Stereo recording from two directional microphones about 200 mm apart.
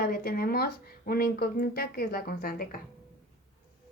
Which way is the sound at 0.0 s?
50° left (ahead or behind).